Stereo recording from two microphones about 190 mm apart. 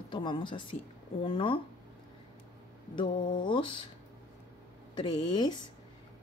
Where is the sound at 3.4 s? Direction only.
25° left (ahead or behind).